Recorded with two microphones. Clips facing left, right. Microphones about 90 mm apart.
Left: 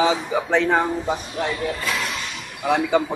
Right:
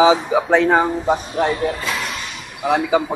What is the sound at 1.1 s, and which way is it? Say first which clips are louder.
Speech: right 6 dB; 30° right (ahead or behind).